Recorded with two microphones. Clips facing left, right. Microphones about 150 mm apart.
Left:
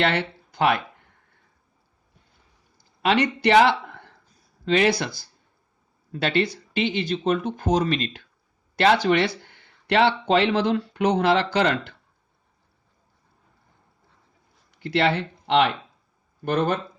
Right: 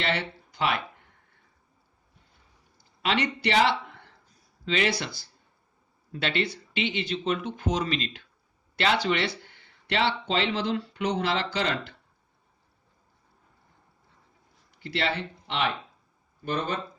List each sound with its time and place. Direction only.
0.0 s speech: 55° left (ahead or behind)
2.7 s speech: 45° left (ahead or behind)
14.8 s speech: 55° left (ahead or behind)